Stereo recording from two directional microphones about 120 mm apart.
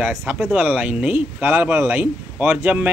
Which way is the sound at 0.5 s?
10° right (ahead or behind).